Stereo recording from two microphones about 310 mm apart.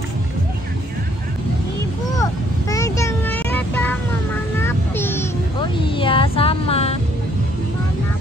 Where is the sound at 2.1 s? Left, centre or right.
Centre.